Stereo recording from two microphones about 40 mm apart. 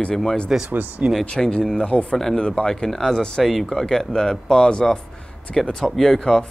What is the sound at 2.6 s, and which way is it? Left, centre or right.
Speech, centre.